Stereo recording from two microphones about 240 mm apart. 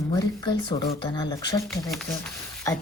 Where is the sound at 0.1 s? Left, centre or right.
Centre.